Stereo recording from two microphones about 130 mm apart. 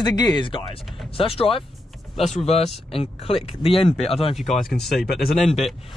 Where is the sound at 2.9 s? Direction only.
50° left (ahead or behind).